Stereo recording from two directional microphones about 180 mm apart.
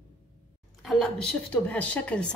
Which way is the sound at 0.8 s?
Centre (ahead or behind).